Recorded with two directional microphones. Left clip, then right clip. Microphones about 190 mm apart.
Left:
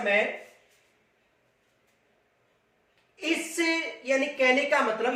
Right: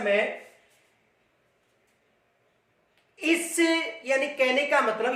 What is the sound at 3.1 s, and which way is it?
A woman's voice, 40° right (ahead or behind).